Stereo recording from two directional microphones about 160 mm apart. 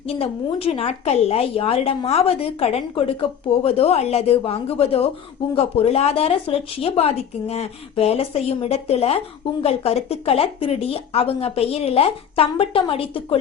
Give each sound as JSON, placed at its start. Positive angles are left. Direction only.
{"t": 0.0, "sound": "a woman's voice", "side_deg": 35}